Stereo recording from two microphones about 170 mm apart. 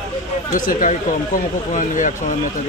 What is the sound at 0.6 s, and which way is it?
Speech, 50° left (ahead or behind).